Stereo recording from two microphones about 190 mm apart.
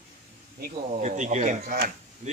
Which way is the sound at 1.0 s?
40° right (ahead or behind).